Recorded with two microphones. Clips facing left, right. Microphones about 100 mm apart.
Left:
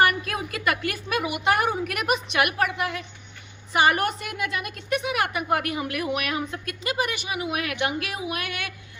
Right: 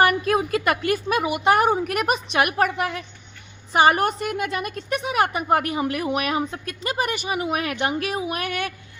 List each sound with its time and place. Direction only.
0.0 s a woman's voice: 35° right (ahead or behind)